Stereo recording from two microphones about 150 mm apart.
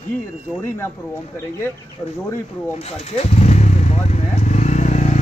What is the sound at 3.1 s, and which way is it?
Vehicle, 45° left (ahead or behind).